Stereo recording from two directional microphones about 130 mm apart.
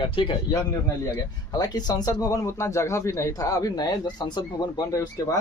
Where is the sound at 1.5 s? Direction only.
30° left (ahead or behind).